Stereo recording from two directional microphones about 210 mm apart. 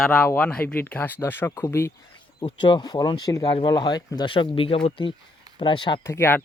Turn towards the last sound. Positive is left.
turn(degrees=10)  # may be behind; listen again after turning